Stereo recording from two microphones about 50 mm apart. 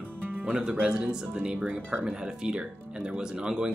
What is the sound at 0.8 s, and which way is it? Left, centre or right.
Speech, centre.